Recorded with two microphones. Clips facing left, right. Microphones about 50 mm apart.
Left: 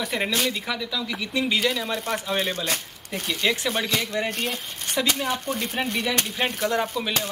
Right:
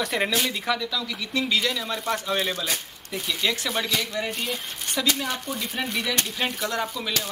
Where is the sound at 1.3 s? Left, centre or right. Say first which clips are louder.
Left 1 dB; left.